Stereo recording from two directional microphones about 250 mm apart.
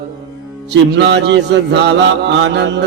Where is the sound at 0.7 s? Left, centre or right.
Right.